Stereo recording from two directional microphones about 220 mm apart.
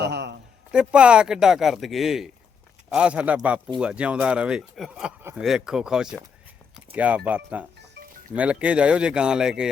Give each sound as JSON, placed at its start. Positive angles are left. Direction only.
{"t": 0.0, "sound": "a sound", "side_deg": -50}
{"t": 0.7, "sound": "a man's voice", "side_deg": -5}
{"t": 6.7, "sound": "a sound", "side_deg": -5}
{"t": 7.3, "sound": "speech", "side_deg": -5}
{"t": 7.8, "sound": "livestock", "side_deg": -40}
{"t": 8.4, "sound": "a man's voice", "side_deg": -5}